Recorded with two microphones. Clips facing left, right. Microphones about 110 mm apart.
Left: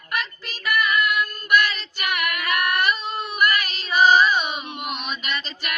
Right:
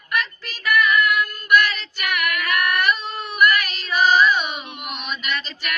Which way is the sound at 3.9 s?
10° left (ahead or behind).